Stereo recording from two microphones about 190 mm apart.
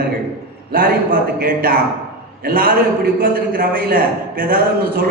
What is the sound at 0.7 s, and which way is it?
A man's voice, 50° right (ahead or behind).